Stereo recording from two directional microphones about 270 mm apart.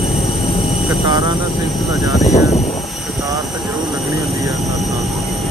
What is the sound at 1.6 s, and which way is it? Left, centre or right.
Speech, centre.